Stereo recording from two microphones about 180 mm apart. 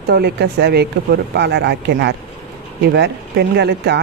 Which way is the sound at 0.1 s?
60° right (ahead or behind).